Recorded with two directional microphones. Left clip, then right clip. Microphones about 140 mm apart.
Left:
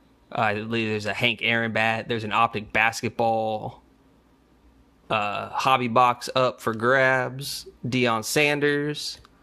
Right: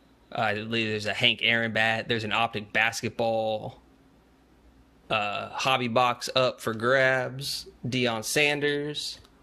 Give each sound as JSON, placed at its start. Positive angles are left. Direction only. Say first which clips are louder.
{"t": 0.3, "sound": "speech", "louder": "left 3 dB", "side_deg": 30}
{"t": 5.0, "sound": "speech", "louder": "left 2 dB", "side_deg": 30}